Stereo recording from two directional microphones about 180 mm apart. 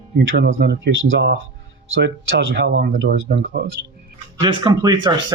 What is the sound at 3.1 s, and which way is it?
Speech, 55° right (ahead or behind).